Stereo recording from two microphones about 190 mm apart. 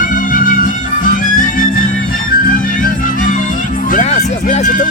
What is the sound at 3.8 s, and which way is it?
Music, 40° left (ahead or behind).